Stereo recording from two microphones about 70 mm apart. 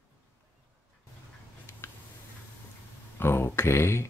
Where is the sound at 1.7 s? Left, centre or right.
Left.